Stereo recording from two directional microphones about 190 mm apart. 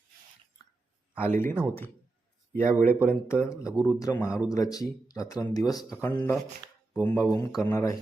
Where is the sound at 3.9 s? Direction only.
20° left (ahead or behind).